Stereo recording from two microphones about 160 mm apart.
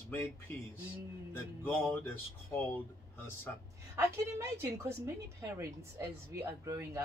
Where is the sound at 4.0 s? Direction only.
15° right (ahead or behind).